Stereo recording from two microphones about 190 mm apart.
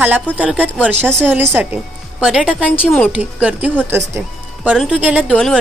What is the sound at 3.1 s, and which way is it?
A woman's voice, 5° right (ahead or behind).